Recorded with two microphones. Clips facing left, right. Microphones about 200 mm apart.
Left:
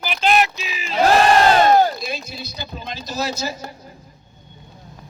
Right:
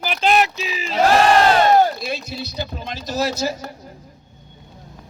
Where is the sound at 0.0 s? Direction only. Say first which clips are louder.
Right 1 dB; 40° right (ahead or behind).